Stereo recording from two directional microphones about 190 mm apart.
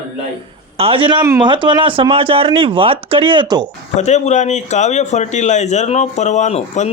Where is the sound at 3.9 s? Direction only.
40° left (ahead or behind).